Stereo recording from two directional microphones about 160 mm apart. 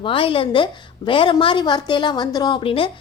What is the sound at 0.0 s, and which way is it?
A woman's voice, 35° left (ahead or behind).